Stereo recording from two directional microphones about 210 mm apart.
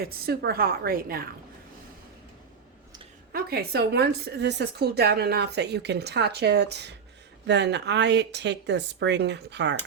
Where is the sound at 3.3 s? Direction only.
45° right (ahead or behind).